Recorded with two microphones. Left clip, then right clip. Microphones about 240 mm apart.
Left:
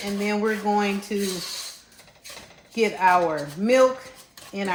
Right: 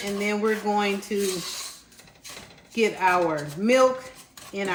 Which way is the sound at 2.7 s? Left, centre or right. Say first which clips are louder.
Left 2 dB; left.